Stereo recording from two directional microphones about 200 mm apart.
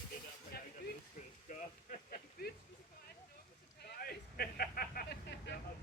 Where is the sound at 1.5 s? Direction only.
40° left (ahead or behind).